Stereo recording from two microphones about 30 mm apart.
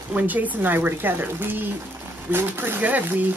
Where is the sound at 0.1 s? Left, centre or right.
Right.